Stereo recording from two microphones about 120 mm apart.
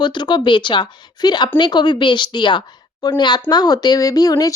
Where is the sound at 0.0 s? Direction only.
40° left (ahead or behind).